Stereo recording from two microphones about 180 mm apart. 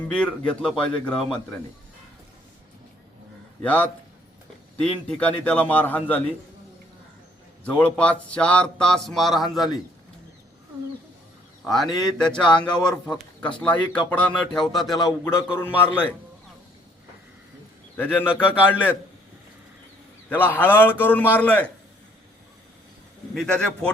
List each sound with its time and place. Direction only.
0.1 s speech: 5° left (ahead or behind)
3.6 s speech: 10° left (ahead or behind)
7.6 s speech: 5° left (ahead or behind)
11.6 s a man's voice: centre (ahead or behind)
14.9 s speech: 20° left (ahead or behind)
17.9 s speech: 10° left (ahead or behind)
20.3 s speech: 10° left (ahead or behind)
23.3 s speech: 5° left (ahead or behind)